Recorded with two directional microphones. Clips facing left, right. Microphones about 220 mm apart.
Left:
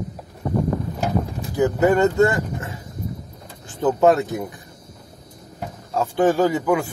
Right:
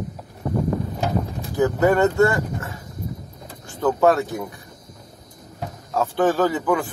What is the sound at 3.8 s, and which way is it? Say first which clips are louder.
Speech: left 1 dB; 20° left (ahead or behind).